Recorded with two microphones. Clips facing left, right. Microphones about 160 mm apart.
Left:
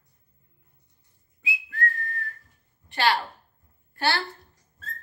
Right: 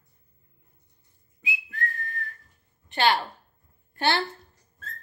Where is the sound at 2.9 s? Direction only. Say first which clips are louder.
Right 1 dB; 20° right (ahead or behind).